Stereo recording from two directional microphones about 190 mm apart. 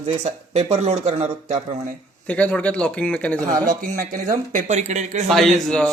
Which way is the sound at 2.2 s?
5° left (ahead or behind).